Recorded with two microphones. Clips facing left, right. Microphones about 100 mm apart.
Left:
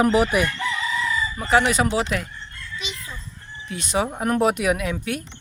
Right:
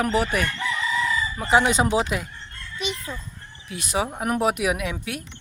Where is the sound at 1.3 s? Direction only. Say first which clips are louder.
Even; 20° right (ahead or behind).